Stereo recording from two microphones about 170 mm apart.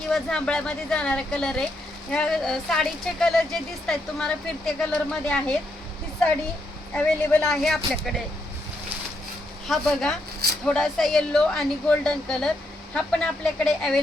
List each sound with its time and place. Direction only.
0.1 s a woman's voice: 5° left (ahead or behind)
6.9 s a woman's voice: 5° left (ahead or behind)
9.6 s a woman's voice: centre (ahead or behind)